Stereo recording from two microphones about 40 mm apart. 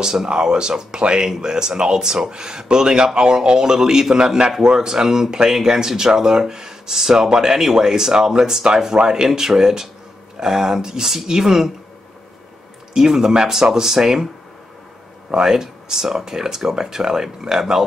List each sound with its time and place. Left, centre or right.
0.0 s speech: centre
12.9 s speech: centre
15.3 s speech: centre